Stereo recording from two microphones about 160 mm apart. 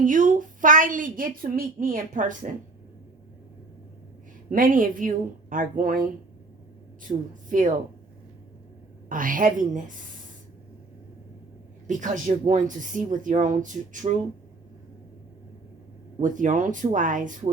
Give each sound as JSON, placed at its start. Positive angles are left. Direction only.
{"t": 0.0, "sound": "a woman's voice", "side_deg": -55}
{"t": 4.4, "sound": "a woman's voice", "side_deg": -60}
{"t": 9.0, "sound": "a woman's voice", "side_deg": -55}
{"t": 11.9, "sound": "speech", "side_deg": -50}
{"t": 16.2, "sound": "speech", "side_deg": -55}